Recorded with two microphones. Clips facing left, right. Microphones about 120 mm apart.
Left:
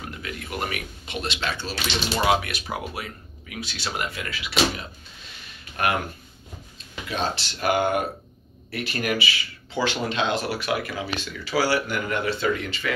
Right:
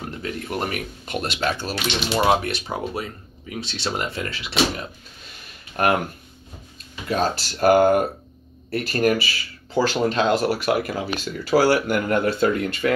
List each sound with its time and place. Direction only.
0.2 s speech: 40° right (ahead or behind)
2.3 s speech: 35° right (ahead or behind)
5.8 s speech: 45° right (ahead or behind)
7.1 s speech: 40° right (ahead or behind)